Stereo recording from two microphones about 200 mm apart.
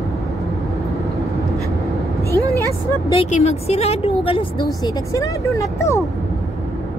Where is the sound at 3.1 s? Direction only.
30° left (ahead or behind); by 6.0 s 15° left (ahead or behind).